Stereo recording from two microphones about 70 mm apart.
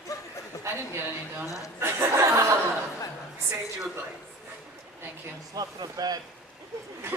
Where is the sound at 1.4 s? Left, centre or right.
Left.